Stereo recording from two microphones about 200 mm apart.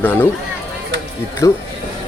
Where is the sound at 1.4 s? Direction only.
15° left (ahead or behind).